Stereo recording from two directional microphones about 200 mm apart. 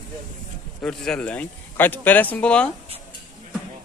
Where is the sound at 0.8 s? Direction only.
5° left (ahead or behind).